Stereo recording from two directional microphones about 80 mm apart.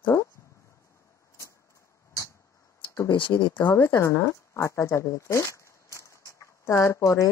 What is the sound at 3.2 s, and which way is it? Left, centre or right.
Speech, left.